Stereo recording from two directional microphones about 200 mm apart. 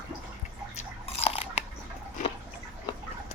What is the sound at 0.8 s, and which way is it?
Biting, 30° left (ahead or behind).